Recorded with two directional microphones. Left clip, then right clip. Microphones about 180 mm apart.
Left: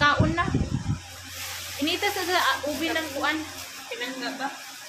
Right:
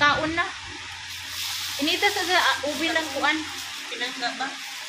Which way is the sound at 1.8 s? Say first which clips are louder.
Right 3 dB; 15° right (ahead or behind).